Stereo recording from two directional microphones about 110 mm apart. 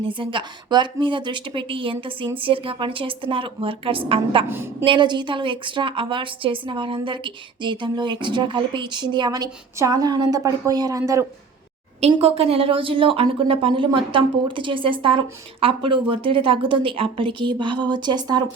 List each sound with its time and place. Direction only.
0.1 s a woman's voice: 50° right (ahead or behind)
4.4 s a woman's voice: 20° right (ahead or behind)
4.9 s a woman's voice: 45° right (ahead or behind)
11.9 s a woman's voice: 70° right (ahead or behind); by 18.4 s 40° right (ahead or behind)